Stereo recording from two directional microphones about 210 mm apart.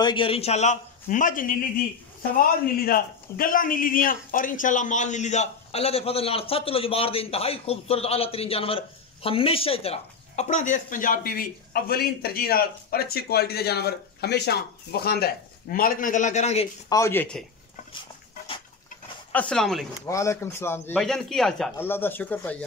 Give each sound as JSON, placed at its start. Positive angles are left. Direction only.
{"t": 0.0, "sound": "a man's voice", "side_deg": 25}
{"t": 16.9, "sound": "a man's voice", "side_deg": 10}
{"t": 19.3, "sound": "speech", "side_deg": 5}
{"t": 20.1, "sound": "a man's voice", "side_deg": 15}